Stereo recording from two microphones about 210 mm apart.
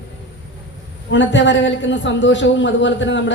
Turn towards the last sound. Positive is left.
turn(degrees=60)  # may be behind; listen again after turning